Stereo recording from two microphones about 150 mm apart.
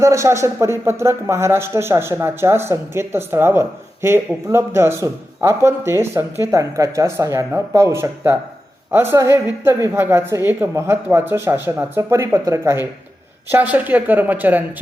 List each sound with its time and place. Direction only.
0.0 s speech: 20° right (ahead or behind)